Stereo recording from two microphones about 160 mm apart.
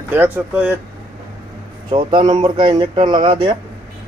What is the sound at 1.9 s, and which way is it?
Speech, 30° right (ahead or behind).